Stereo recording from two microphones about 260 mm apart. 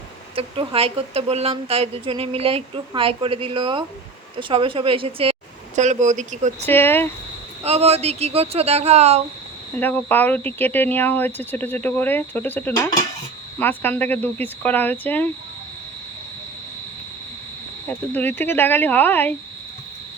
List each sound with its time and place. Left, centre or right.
0.3 s speech: right
6.7 s speech: centre
7.6 s speech: right
9.7 s speech: centre
17.8 s speech: centre